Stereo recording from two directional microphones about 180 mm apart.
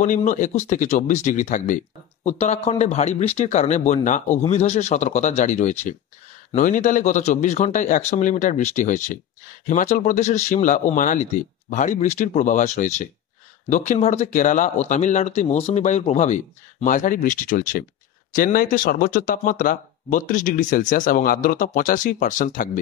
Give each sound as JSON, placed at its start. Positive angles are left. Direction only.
{"t": 0.0, "sound": "speech", "side_deg": 45}